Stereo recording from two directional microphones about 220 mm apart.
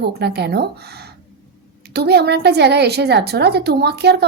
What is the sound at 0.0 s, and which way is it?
A woman's voice, 50° right (ahead or behind).